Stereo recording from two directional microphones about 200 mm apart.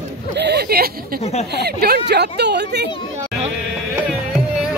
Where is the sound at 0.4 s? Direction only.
55° right (ahead or behind).